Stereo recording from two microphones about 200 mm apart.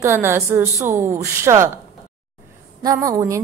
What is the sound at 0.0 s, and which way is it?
A woman's voice, 10° right (ahead or behind).